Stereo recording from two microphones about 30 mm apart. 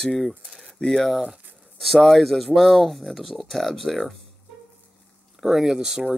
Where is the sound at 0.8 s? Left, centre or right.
Centre.